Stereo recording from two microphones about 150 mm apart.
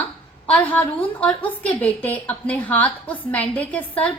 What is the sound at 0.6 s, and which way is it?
A woman's voice, 10° left (ahead or behind).